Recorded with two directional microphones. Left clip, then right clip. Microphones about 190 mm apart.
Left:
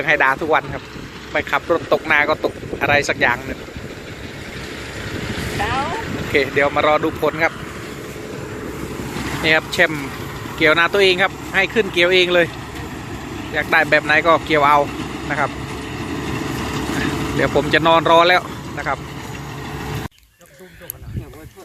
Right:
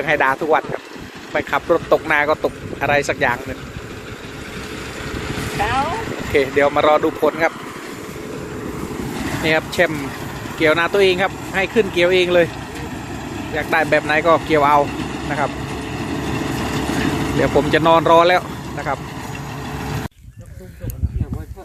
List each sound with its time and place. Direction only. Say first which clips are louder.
0.0 s speech: left 1 dB; 5° right (ahead or behind)
5.1 s vehicle: even; 60° right (ahead or behind)
6.3 s speech: right 1 dB; 10° right (ahead or behind)
9.4 s speech: left 2 dB; 5° right (ahead or behind)
13.5 s vehicle: left 2 dB; 5° right (ahead or behind)